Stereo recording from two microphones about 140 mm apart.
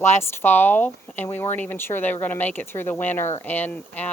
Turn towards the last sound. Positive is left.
turn(degrees=10)  # may be behind; listen again after turning